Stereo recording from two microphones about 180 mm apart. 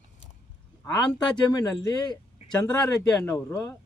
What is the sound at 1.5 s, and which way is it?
A man's voice, 20° left (ahead or behind).